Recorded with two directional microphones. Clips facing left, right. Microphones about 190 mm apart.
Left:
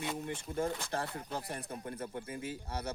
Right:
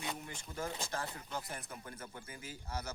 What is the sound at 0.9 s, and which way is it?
Speech, 35° left (ahead or behind).